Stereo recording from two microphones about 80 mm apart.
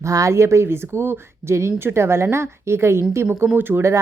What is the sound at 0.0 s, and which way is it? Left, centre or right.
Speech, right.